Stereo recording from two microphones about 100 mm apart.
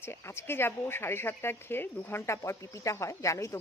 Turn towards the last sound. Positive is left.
turn(degrees=30)  # may be behind; listen again after turning